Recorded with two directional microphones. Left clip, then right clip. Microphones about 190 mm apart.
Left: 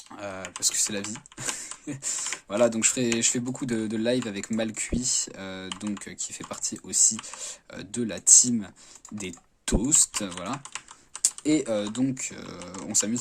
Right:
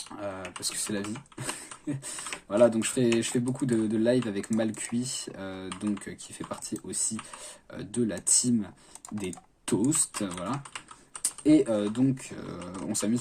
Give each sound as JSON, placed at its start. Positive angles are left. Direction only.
{"t": 0.1, "sound": "speech", "side_deg": 35}